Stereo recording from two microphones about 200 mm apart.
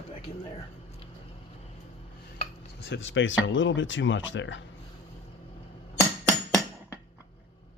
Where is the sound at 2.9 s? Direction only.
70° left (ahead or behind).